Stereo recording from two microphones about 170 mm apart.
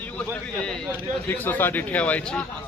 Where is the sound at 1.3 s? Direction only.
10° left (ahead or behind).